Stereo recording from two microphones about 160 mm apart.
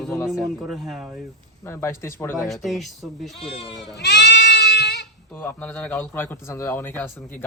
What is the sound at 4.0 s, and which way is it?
Goat, 90° left.